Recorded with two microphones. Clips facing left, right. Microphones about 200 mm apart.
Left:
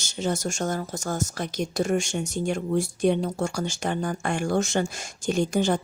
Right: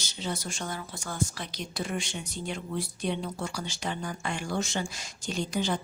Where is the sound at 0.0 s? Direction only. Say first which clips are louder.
Left 8 dB; 45° left (ahead or behind).